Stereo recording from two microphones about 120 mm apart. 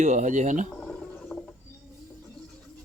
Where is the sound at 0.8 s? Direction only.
5° left (ahead or behind).